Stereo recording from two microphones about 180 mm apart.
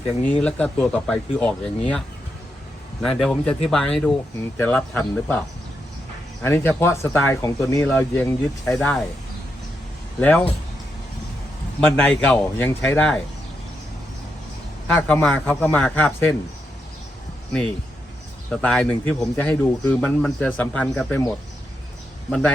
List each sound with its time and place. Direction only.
0.2 s speech: 5° left (ahead or behind)
6.4 s speech: 15° left (ahead or behind)
10.2 s speech: 10° left (ahead or behind)
11.8 s speech: 5° left (ahead or behind)
14.8 s speech: 5° left (ahead or behind)
18.5 s speech: 5° left (ahead or behind)
22.3 s speech: centre (ahead or behind)